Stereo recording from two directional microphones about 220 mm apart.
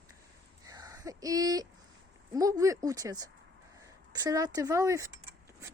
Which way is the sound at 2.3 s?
15° right (ahead or behind).